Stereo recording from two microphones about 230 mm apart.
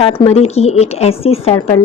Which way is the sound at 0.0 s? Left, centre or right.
Left.